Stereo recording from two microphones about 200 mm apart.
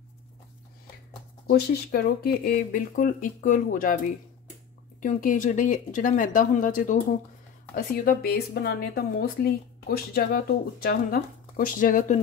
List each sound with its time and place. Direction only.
1.5 s speech: 50° left (ahead or behind)
5.0 s speech: 40° left (ahead or behind)